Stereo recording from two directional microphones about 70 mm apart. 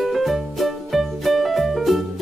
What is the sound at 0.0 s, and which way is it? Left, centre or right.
Music, centre.